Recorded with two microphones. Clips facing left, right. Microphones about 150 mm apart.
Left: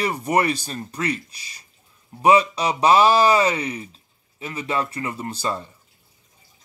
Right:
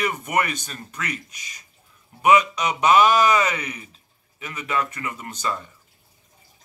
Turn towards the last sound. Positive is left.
turn(degrees=30)  # may be behind; listen again after turning